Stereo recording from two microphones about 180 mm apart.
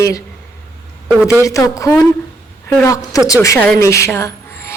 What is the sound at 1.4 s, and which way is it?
A woman's voice, 15° left (ahead or behind).